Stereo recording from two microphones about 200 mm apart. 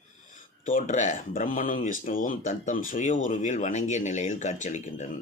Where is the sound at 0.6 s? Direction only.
40° left (ahead or behind).